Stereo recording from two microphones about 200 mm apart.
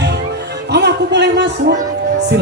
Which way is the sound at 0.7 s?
60° right (ahead or behind).